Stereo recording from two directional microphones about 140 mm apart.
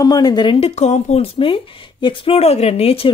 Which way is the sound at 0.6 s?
50° left (ahead or behind).